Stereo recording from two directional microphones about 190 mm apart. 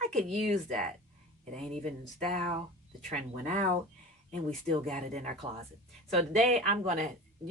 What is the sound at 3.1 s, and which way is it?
Speech, 40° right (ahead or behind).